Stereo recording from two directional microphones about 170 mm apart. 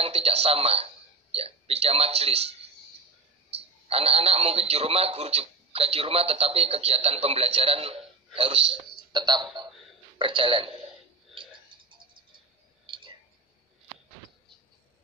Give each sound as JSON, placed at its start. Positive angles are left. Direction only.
{"t": 0.0, "sound": "a man's voice", "side_deg": -35}